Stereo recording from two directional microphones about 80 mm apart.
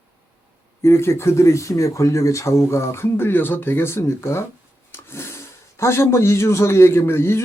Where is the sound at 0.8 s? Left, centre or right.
Left.